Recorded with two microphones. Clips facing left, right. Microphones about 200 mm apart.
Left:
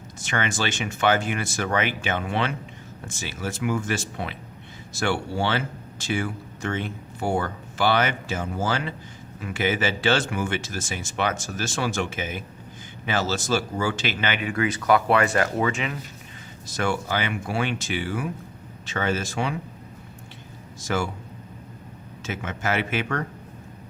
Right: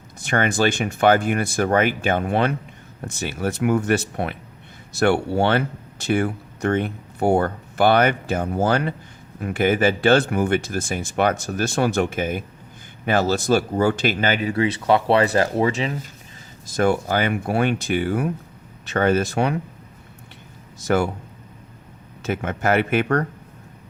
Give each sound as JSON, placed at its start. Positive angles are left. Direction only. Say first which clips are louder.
{"t": 0.3, "sound": "speech", "louder": "right 7 dB", "side_deg": -55}
{"t": 3.0, "sound": "speech", "louder": "right 7 dB", "side_deg": -60}
{"t": 16.7, "sound": "speech", "louder": "right 6 dB", "side_deg": -50}
{"t": 20.8, "sound": "speech", "louder": "right 7 dB", "side_deg": -60}
{"t": 22.2, "sound": "speech", "louder": "right 7 dB", "side_deg": -55}